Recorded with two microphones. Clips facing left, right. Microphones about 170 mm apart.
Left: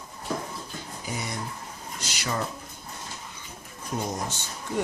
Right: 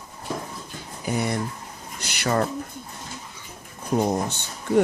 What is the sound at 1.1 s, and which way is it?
Speech, 60° right (ahead or behind).